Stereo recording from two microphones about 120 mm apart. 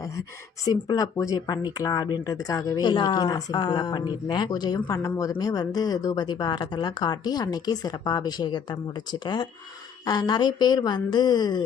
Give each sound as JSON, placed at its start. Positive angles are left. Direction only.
{"t": 0.7, "sound": "speech", "side_deg": 30}